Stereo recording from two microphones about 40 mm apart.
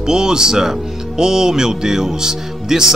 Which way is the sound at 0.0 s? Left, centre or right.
Centre.